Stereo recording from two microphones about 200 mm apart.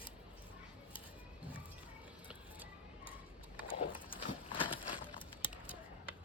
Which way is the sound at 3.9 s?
25° left (ahead or behind).